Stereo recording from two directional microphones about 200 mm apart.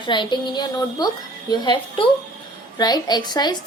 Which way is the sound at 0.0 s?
25° left (ahead or behind).